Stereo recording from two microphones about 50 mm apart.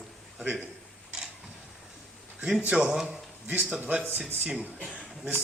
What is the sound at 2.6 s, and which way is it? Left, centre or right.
Speech, centre.